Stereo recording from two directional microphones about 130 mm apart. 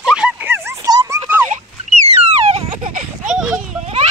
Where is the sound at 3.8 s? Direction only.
60° right (ahead or behind).